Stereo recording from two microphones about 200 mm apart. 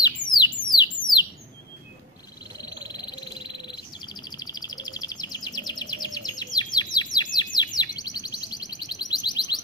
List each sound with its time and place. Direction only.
0.0 s bird: 20° left (ahead or behind)
2.8 s bird: 20° left (ahead or behind)
7.3 s chirp: 20° left (ahead or behind)